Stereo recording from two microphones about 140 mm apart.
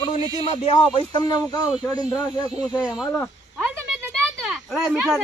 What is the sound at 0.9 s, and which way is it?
Speech, 30° left (ahead or behind).